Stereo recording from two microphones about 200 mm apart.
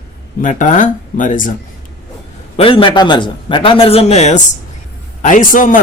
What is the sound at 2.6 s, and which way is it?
A man's voice, 25° left (ahead or behind).